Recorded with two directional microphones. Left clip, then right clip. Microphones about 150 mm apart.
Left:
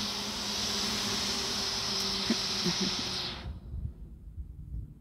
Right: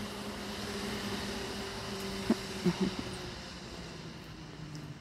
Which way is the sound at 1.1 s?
5° right (ahead or behind).